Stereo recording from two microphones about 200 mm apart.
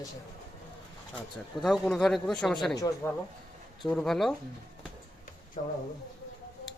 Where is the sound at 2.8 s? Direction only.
15° left (ahead or behind).